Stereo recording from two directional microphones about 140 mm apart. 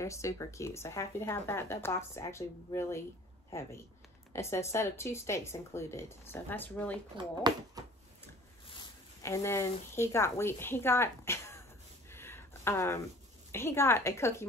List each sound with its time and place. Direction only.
0.0 s speech: 20° left (ahead or behind)
7.2 s speech: 30° right (ahead or behind)
9.2 s speech: 20° left (ahead or behind)
12.1 s a sound: 15° left (ahead or behind)
13.5 s a woman's voice: 15° left (ahead or behind)